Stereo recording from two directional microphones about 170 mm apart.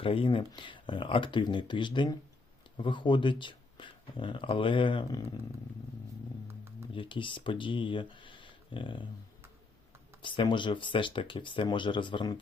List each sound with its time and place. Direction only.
0.0 s speech: 30° left (ahead or behind)
6.9 s speech: 30° left (ahead or behind)
10.2 s speech: 30° left (ahead or behind)